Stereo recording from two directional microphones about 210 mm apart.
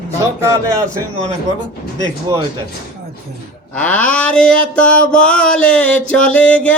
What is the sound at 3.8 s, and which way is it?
Mantra, 5° left (ahead or behind).